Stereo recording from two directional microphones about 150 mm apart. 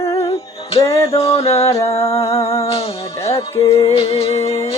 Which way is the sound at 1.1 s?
45° left (ahead or behind).